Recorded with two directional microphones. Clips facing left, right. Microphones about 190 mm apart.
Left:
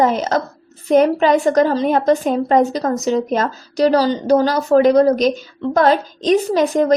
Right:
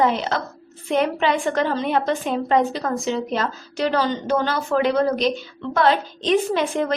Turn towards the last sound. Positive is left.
turn(degrees=40)  # may be behind; listen again after turning